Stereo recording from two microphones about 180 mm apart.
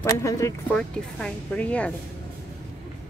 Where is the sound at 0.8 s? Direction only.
5° left (ahead or behind).